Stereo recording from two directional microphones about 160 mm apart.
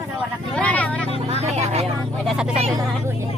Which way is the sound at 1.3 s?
40° right (ahead or behind).